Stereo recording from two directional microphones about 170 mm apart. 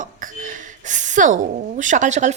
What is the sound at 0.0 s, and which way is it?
A woman's voice, 50° right (ahead or behind).